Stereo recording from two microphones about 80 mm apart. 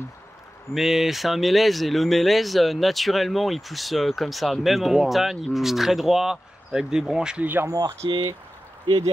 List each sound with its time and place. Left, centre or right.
0.7 s speech: centre
7.4 s speech: right
8.0 s speech: right